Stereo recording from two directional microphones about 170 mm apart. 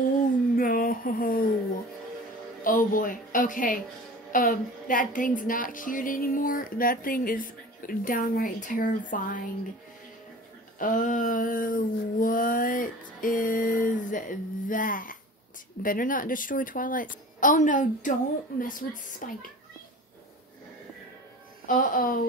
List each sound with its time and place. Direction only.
0.6 s a sound: 55° left (ahead or behind)
2.6 s speech: 55° left (ahead or behind)
10.8 s speech: 50° left (ahead or behind)
21.6 s speech: 55° left (ahead or behind)